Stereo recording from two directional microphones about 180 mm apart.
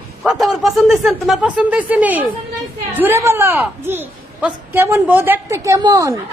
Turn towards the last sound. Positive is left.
turn(degrees=-20)  # may be behind; listen again after turning